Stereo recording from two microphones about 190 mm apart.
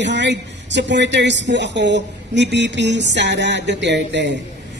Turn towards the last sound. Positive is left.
turn(degrees=-65)  # may be behind; listen again after turning